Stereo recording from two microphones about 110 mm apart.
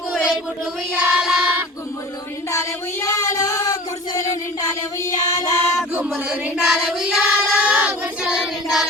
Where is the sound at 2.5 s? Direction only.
25° left (ahead or behind).